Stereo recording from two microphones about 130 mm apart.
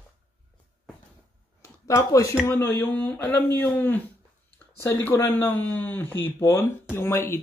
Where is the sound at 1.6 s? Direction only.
25° left (ahead or behind).